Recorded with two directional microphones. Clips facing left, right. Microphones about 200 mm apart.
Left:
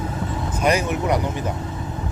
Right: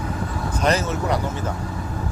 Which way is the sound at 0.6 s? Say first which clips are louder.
Left 1 dB; 15° left (ahead or behind).